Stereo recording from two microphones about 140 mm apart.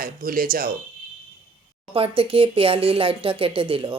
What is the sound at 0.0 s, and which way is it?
Speech, 90° right.